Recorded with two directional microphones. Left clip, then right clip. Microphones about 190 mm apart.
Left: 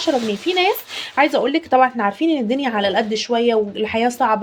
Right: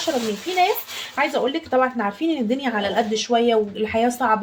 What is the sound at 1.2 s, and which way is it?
Speech, 40° left (ahead or behind).